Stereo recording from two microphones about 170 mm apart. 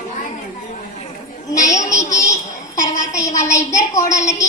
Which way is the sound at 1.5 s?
20° left (ahead or behind).